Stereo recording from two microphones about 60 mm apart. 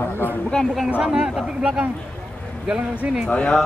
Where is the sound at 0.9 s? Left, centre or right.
Right.